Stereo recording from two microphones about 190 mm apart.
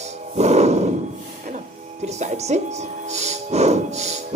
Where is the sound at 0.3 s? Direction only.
35° right (ahead or behind).